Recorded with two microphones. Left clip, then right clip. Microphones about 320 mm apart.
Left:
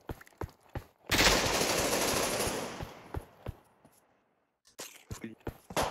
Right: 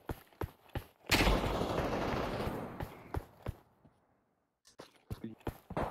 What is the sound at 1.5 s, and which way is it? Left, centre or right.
Machine gun, left.